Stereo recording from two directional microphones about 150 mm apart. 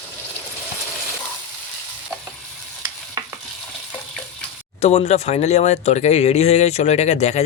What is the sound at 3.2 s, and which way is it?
Stir, 25° right (ahead or behind).